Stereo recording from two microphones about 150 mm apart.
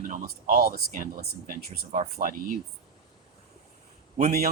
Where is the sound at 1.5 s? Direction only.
65° right (ahead or behind).